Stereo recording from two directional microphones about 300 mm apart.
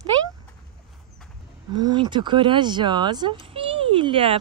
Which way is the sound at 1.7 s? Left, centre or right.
Centre.